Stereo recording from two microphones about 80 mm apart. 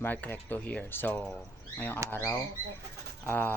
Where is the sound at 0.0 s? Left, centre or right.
Left.